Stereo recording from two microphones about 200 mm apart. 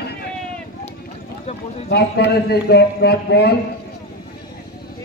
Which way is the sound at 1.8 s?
55° left (ahead or behind).